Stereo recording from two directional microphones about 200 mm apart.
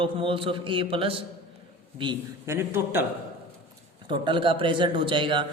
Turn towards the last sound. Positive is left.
turn(degrees=-25)  # may be behind; listen again after turning